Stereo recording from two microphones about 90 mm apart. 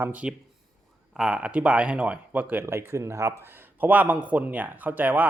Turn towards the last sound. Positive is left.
turn(degrees=-20)  # may be behind; listen again after turning